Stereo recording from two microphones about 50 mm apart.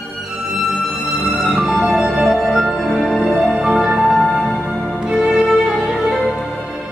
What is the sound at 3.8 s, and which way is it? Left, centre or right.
Music, centre.